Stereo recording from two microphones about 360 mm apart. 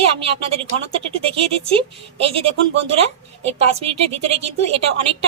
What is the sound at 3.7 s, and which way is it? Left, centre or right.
A woman's voice, centre.